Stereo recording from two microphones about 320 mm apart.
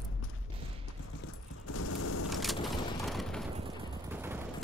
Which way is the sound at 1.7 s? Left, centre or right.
Left.